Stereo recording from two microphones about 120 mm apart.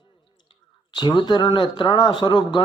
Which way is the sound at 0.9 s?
40° left (ahead or behind).